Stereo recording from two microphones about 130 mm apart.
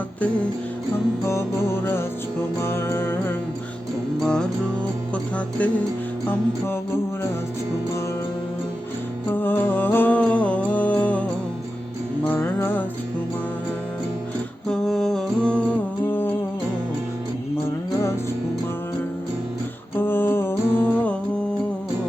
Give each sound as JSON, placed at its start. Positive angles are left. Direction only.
{"t": 1.2, "sound": "music", "side_deg": 20}
{"t": 4.2, "sound": "music", "side_deg": 5}
{"t": 9.3, "sound": "music", "side_deg": 15}
{"t": 14.7, "sound": "mantra", "side_deg": 5}
{"t": 20.0, "sound": "mantra", "side_deg": 15}